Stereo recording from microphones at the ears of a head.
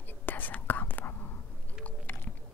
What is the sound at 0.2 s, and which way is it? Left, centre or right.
Whispering, left.